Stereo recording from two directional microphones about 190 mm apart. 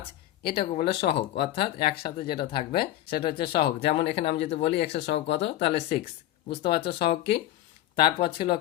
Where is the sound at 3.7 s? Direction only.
35° left (ahead or behind).